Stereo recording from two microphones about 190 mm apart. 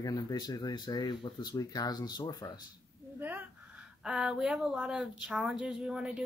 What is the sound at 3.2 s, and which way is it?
A woman's voice, 10° right (ahead or behind).